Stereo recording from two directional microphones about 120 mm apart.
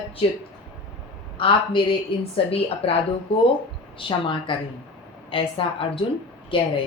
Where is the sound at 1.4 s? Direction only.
45° left (ahead or behind).